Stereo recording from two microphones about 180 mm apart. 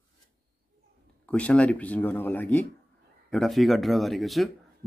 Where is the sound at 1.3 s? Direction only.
5° left (ahead or behind).